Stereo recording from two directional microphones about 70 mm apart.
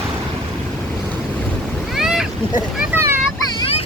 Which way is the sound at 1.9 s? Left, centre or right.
Centre.